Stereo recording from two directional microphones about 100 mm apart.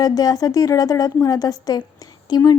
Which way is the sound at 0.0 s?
40° left (ahead or behind).